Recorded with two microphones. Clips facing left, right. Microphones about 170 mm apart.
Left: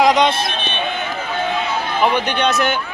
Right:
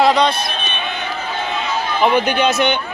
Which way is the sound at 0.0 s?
20° left (ahead or behind).